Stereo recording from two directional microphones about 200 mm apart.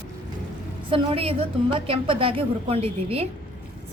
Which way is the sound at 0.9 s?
30° right (ahead or behind).